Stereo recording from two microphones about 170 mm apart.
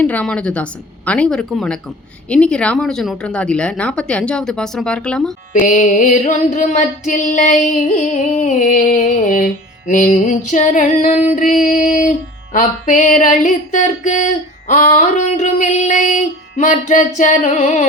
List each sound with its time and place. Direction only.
0.0 s a woman's voice: 10° left (ahead or behind)
5.5 s music: 50° left (ahead or behind)